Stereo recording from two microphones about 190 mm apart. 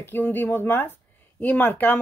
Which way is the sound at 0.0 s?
10° left (ahead or behind).